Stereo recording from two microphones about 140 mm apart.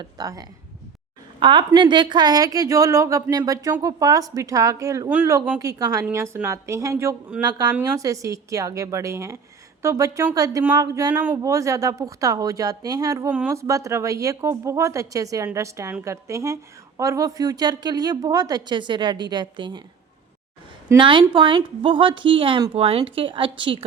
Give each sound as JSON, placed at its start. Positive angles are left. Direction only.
{"t": 0.0, "sound": "a woman's voice", "side_deg": -25}
{"t": 11.1, "sound": "speech", "side_deg": -10}
{"t": 11.4, "sound": "a woman's voice", "side_deg": -20}
{"t": 21.0, "sound": "a woman's voice", "side_deg": -35}